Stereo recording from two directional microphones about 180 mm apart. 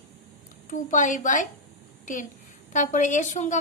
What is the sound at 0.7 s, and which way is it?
A woman's voice, 45° left (ahead or behind).